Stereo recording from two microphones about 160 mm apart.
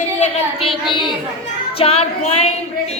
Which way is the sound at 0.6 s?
35° left (ahead or behind).